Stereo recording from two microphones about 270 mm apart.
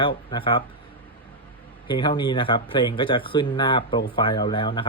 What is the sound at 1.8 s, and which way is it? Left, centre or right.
Speech, centre.